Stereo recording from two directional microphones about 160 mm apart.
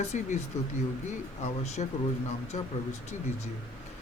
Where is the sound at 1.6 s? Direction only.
45° left (ahead or behind).